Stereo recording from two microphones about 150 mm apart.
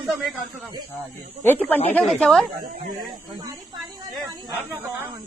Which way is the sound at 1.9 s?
5° left (ahead or behind).